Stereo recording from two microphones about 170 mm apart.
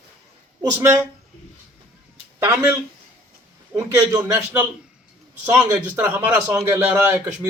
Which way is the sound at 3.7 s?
15° right (ahead or behind).